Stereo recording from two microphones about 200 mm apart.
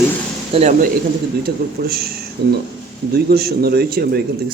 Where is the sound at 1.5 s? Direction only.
50° right (ahead or behind).